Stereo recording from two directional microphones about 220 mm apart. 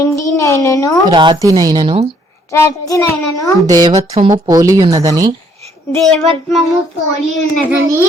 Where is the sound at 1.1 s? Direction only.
20° right (ahead or behind).